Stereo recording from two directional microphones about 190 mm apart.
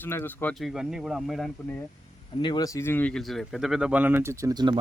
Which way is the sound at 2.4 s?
20° left (ahead or behind).